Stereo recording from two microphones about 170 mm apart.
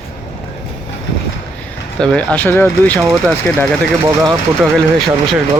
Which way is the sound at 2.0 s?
5° left (ahead or behind).